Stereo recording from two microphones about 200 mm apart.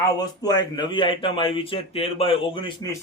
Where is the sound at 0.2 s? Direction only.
20° left (ahead or behind).